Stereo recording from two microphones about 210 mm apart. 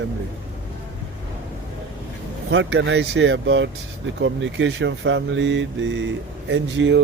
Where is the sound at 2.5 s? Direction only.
60° right (ahead or behind).